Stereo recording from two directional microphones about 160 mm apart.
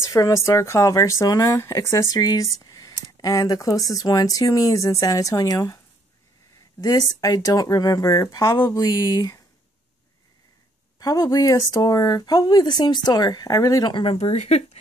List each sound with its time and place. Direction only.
0.0 s speech: 20° left (ahead or behind)
6.8 s speech: 20° left (ahead or behind)
11.0 s speech: 25° left (ahead or behind); by 14.8 s 40° left (ahead or behind)